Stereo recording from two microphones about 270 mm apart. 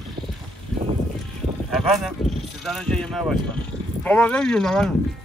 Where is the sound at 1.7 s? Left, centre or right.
Centre.